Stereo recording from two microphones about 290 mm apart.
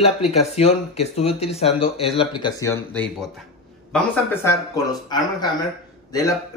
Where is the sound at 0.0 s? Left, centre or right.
Left.